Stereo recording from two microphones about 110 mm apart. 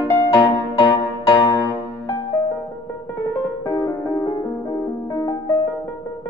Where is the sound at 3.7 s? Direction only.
35° left (ahead or behind).